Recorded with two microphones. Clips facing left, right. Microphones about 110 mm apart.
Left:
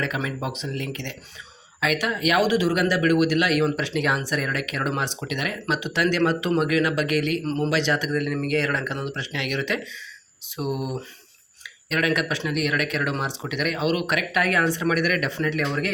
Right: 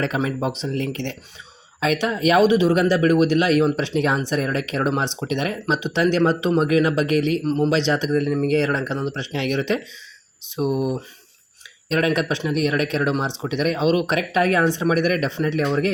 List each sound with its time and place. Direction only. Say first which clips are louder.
0.0 s speech: right 5 dB; 35° right (ahead or behind)
7.4 s speech: right 5 dB; 15° right (ahead or behind)
7.7 s speech: right 4 dB; 25° right (ahead or behind)